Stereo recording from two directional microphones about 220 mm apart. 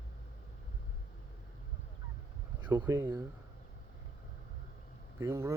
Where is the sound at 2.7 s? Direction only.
15° right (ahead or behind).